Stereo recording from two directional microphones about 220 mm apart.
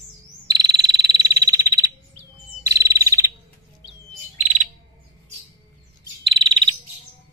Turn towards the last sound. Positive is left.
turn(degrees=-20)  # may be behind; listen again after turning